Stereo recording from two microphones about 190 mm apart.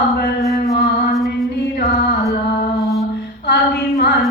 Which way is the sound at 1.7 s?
60° left (ahead or behind).